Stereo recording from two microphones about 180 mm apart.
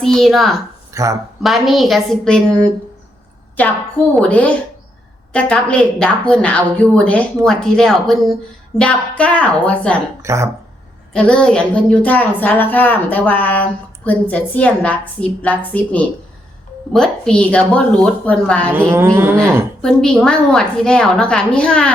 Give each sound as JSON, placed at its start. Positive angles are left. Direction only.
{"t": 0.0, "sound": "a woman's voice", "side_deg": 0}
{"t": 0.9, "sound": "speech", "side_deg": -15}
{"t": 1.4, "sound": "a woman's voice", "side_deg": 0}
{"t": 4.1, "sound": "a woman's voice", "side_deg": 10}
{"t": 10.2, "sound": "speech", "side_deg": -15}
{"t": 11.1, "sound": "a woman's voice", "side_deg": 5}
{"t": 18.7, "sound": "speech", "side_deg": -15}
{"t": 19.8, "sound": "a woman's voice", "side_deg": 5}